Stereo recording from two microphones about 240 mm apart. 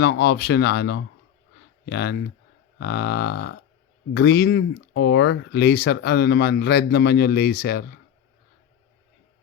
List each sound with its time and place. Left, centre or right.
0.0 s speech: left